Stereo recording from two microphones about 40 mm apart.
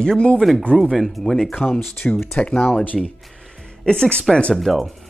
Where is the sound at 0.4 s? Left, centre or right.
Centre.